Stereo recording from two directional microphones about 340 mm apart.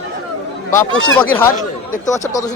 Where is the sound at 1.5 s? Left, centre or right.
Left.